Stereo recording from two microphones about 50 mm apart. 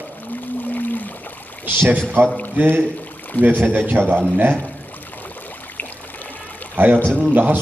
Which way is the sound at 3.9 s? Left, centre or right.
Right.